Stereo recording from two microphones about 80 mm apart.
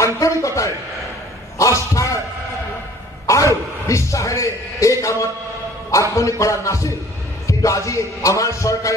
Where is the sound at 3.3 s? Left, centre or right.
Left.